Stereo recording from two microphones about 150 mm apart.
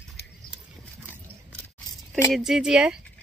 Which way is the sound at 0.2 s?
90° left.